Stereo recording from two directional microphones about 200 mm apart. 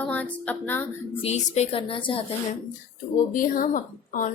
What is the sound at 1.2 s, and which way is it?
Speech, 35° left (ahead or behind).